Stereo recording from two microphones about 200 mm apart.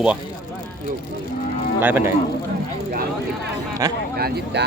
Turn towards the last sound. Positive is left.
turn(degrees=-55)  # may be behind; listen again after turning